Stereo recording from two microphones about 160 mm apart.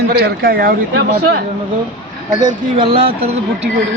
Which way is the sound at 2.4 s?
30° right (ahead or behind).